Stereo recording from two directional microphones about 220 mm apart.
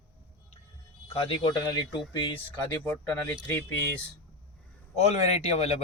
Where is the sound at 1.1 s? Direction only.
25° left (ahead or behind).